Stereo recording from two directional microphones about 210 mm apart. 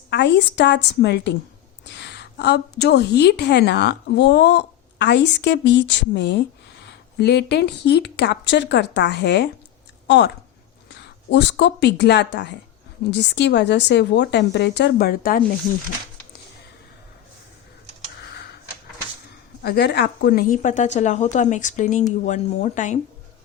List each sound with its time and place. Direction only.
0.1 s a woman's voice: 55° left (ahead or behind)
19.6 s a woman's voice: 50° left (ahead or behind)